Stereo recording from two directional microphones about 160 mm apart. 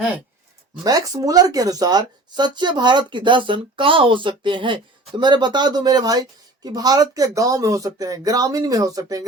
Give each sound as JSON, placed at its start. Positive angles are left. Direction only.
{"t": 0.9, "sound": "speech", "side_deg": -20}